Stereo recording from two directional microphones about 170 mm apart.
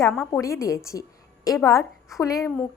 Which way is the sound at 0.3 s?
15° left (ahead or behind).